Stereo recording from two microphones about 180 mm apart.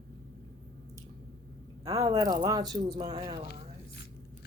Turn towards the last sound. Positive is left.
turn(degrees=-25)  # may be behind; listen again after turning